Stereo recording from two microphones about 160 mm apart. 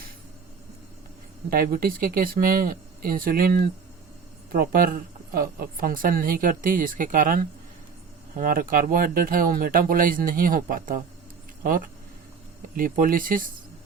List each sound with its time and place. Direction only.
1.5 s a woman's voice: 65° right (ahead or behind)